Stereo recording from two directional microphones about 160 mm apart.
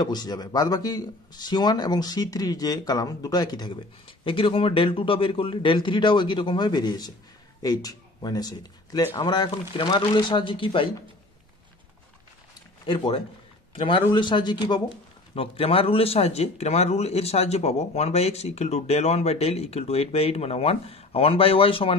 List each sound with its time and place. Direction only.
0.0 s speech: 25° left (ahead or behind)
12.8 s speech: 30° left (ahead or behind)